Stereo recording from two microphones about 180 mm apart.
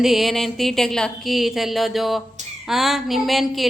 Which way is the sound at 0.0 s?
Centre (ahead or behind).